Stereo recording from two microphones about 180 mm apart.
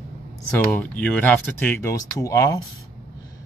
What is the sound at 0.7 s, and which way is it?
Speech, 5° left (ahead or behind).